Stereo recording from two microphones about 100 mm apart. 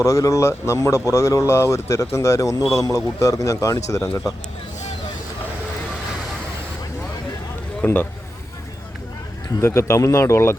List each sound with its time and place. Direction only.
0.0 s speech: 30° left (ahead or behind)
7.8 s speech: 15° left (ahead or behind)
9.6 s speech: 25° left (ahead or behind)